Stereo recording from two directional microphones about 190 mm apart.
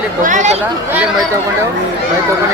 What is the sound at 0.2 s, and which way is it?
Speech, 40° right (ahead or behind).